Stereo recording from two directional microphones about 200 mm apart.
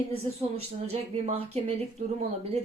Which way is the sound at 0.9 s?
30° right (ahead or behind).